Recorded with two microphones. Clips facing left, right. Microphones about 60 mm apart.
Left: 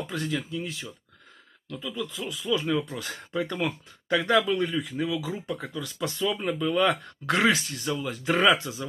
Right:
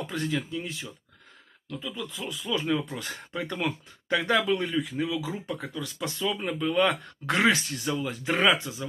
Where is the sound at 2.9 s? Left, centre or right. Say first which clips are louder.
Left 3 dB; right.